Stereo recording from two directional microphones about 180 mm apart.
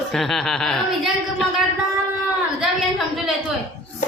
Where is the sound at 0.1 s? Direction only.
Centre (ahead or behind).